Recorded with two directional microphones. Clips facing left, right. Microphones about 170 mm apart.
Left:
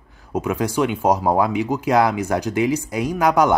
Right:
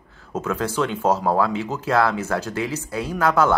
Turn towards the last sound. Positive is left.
turn(degrees=15)  # may be behind; listen again after turning